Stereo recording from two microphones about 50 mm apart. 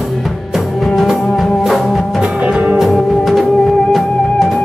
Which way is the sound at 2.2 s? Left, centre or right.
Centre.